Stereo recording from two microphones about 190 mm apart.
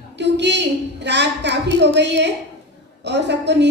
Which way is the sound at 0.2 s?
65° right (ahead or behind).